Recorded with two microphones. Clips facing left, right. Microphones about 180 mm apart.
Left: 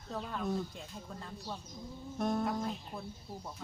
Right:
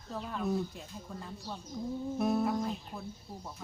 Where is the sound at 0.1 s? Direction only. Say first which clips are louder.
Right 2 dB; 5° right (ahead or behind).